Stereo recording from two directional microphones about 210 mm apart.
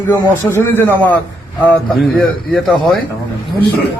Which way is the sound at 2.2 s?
Centre (ahead or behind).